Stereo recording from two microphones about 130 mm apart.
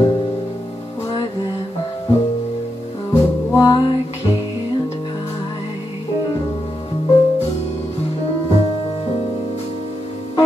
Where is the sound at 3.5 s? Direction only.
20° left (ahead or behind).